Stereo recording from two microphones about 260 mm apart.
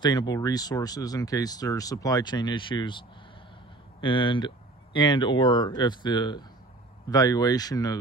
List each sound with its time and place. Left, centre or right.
0.0 s speech: centre